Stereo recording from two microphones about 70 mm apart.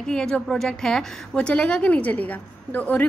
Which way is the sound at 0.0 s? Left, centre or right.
Centre.